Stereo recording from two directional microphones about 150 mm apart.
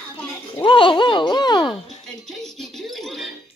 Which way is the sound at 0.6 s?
35° left (ahead or behind).